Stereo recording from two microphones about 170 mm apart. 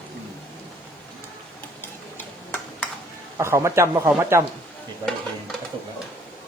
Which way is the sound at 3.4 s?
15° right (ahead or behind).